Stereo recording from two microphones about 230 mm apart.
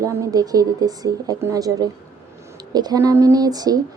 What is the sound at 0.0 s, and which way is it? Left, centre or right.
A woman's voice, centre.